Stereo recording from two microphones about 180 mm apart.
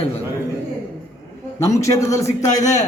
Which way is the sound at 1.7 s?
15° left (ahead or behind).